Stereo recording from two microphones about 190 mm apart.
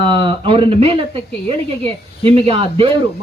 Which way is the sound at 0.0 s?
25° right (ahead or behind).